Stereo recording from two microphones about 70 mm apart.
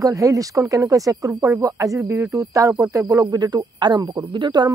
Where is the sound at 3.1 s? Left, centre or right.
Right.